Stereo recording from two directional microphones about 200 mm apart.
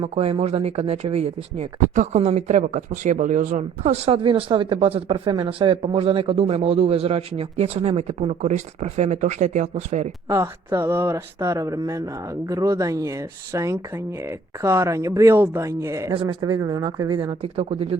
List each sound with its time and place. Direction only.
0.0 s speech: 30° right (ahead or behind)
10.2 s speech: 15° right (ahead or behind)